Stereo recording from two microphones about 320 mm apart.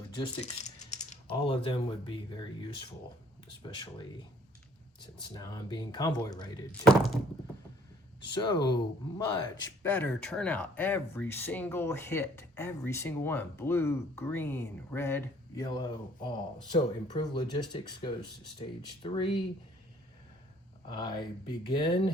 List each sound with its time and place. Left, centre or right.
0.1 s speech: centre
8.4 s speech: centre
20.8 s speech: centre